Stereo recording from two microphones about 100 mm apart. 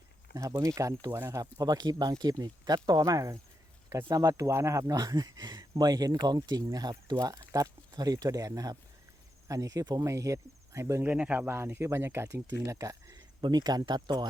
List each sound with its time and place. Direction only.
0.6 s speech: 35° right (ahead or behind)
11.1 s speech: 15° right (ahead or behind); by 14.3 s 45° right (ahead or behind)